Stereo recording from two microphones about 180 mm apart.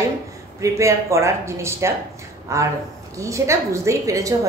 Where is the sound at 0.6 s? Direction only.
15° right (ahead or behind).